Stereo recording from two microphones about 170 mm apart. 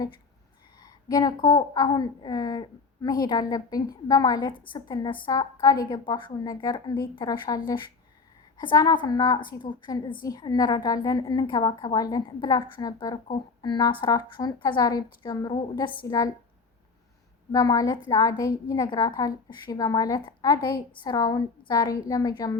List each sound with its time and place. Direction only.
0.8 s a woman's voice: 20° left (ahead or behind)
17.5 s a woman's voice: 20° left (ahead or behind)